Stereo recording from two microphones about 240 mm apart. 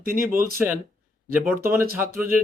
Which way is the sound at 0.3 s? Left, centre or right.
Right.